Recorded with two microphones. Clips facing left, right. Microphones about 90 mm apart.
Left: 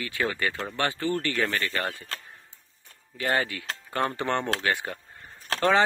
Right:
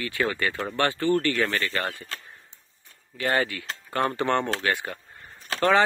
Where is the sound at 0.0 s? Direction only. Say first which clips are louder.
Right 2 dB; 15° left (ahead or behind).